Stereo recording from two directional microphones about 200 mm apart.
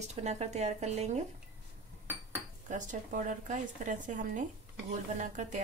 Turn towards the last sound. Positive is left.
turn(degrees=-35)  # may be behind; listen again after turning